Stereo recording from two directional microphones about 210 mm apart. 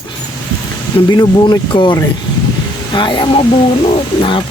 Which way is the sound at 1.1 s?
20° left (ahead or behind).